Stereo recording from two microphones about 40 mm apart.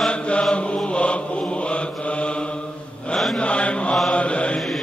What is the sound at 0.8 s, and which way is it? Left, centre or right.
Mantra, left.